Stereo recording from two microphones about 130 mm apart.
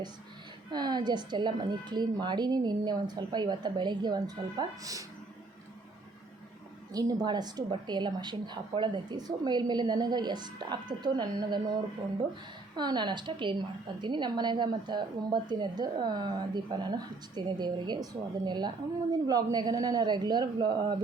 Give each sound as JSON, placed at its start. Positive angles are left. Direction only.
{"t": 0.7, "sound": "a woman's voice", "side_deg": -35}
{"t": 6.9, "sound": "a woman's voice", "side_deg": -30}
{"t": 12.7, "sound": "a woman's voice", "side_deg": -35}